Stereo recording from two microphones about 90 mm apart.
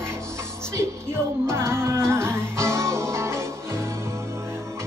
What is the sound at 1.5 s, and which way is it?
Music, 30° right (ahead or behind).